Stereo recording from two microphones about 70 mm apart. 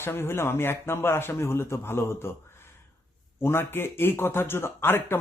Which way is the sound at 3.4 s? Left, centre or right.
Left.